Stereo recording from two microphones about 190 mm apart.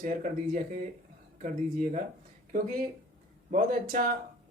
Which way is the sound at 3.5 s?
45° right (ahead or behind).